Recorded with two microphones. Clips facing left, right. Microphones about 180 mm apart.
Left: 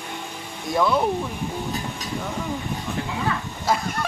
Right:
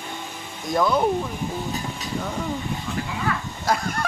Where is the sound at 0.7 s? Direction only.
5° left (ahead or behind).